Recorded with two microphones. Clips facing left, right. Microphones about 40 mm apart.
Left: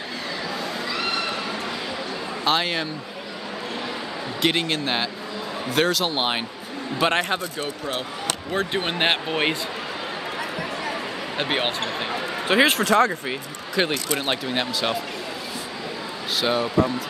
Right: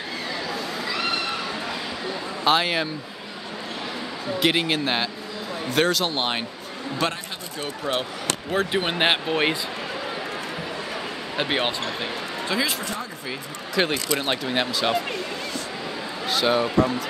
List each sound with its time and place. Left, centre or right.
2.4 s speech: centre
4.4 s a man's voice: centre
8.5 s speech: centre
11.3 s speech: centre
12.4 s speech: left
12.8 s speech: left
13.7 s speech: centre
16.3 s speech: centre